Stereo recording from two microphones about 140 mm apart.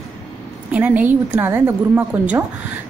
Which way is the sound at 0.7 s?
10° right (ahead or behind).